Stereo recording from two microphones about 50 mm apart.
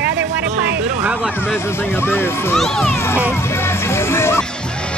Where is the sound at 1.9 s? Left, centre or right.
Left.